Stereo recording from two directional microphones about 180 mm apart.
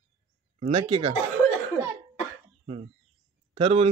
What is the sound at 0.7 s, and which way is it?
Speech, 30° right (ahead or behind).